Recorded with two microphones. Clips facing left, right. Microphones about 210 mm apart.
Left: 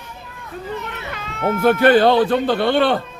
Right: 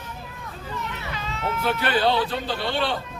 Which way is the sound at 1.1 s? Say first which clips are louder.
Left 9 dB; 55° left (ahead or behind).